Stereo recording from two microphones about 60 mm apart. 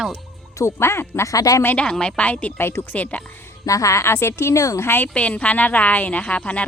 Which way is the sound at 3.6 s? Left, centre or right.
Left.